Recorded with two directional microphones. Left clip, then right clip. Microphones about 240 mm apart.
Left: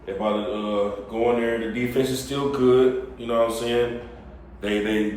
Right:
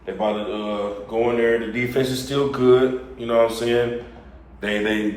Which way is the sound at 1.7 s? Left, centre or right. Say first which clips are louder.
Right 2 dB; centre.